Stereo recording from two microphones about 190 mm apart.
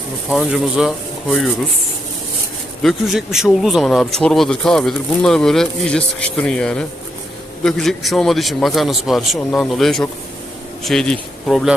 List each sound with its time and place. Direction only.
0.3 s speech: centre (ahead or behind)
2.8 s speech: centre (ahead or behind)